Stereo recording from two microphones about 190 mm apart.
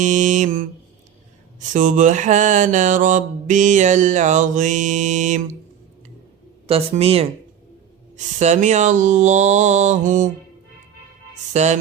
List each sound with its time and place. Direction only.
0.0 s mantra: 40° right (ahead or behind)
6.7 s mantra: 30° right (ahead or behind)
11.5 s mantra: 35° right (ahead or behind)